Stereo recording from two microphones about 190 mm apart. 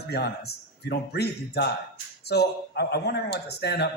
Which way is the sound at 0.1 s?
60° left (ahead or behind).